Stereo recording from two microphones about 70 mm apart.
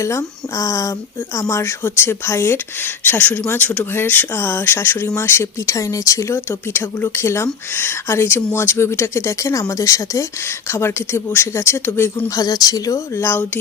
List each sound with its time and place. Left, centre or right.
0.0 s speech: left
1.8 s speech: left
3.2 s speech: left
6.5 s speech: left
10.7 s speech: left
12.3 s speech: left
13.1 s speech: left